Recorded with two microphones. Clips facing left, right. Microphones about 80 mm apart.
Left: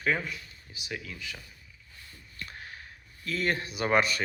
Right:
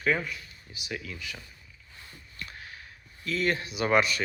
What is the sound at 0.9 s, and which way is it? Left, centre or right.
Speech, centre.